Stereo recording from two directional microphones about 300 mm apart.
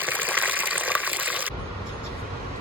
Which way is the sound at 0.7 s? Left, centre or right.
Centre.